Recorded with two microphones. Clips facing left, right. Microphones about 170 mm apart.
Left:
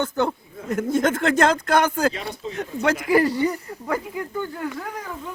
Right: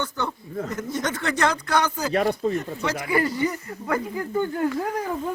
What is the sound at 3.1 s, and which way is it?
Speech, 35° left (ahead or behind).